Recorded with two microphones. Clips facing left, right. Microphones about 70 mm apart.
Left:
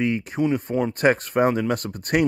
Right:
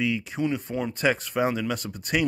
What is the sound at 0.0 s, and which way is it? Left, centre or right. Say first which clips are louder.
Speech: left 4 dB; left.